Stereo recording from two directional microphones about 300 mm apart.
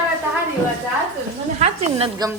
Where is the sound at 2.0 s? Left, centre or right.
Centre.